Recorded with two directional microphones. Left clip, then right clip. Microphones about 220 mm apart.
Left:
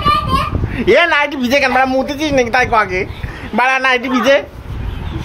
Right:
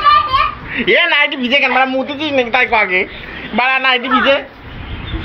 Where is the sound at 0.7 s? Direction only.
30° left (ahead or behind).